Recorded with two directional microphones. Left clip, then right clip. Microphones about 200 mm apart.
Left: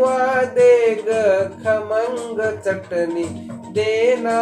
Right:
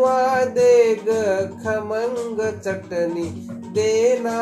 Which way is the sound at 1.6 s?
30° right (ahead or behind).